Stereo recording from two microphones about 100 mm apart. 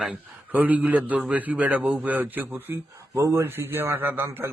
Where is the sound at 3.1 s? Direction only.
30° right (ahead or behind).